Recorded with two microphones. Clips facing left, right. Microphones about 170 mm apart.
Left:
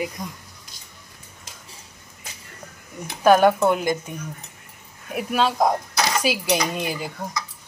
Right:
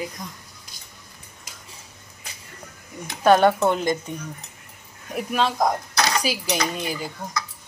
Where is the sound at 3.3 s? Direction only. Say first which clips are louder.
Left 1 dB; 5° left (ahead or behind).